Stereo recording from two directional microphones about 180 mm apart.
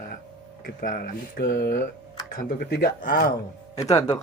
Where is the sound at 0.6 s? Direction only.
50° left (ahead or behind).